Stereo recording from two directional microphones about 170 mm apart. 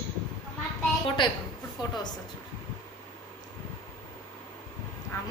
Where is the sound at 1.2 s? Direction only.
30° left (ahead or behind).